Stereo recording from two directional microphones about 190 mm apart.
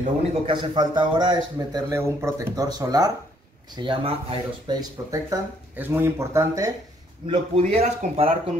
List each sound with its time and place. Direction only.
0.0 s a man's voice: 30° right (ahead or behind)
7.2 s speech: 30° right (ahead or behind)